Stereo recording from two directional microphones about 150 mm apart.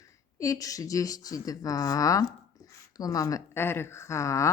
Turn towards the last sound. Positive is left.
turn(degrees=20)  # may be behind; listen again after turning